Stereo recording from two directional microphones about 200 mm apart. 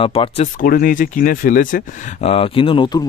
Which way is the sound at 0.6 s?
45° left (ahead or behind).